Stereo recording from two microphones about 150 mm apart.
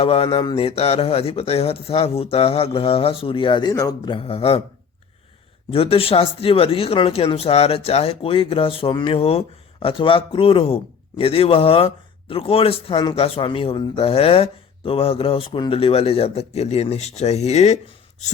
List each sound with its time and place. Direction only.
0.0 s a man's voice: 40° left (ahead or behind)
5.7 s a man's voice: 40° left (ahead or behind)